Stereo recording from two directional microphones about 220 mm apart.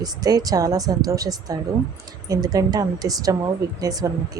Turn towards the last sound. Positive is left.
turn(degrees=-15)  # may be behind; listen again after turning